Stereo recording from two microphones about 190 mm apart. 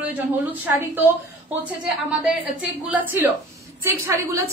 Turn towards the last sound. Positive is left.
turn(degrees=-15)  # may be behind; listen again after turning